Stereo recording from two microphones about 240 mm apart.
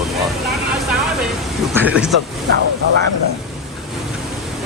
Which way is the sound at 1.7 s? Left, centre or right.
Centre.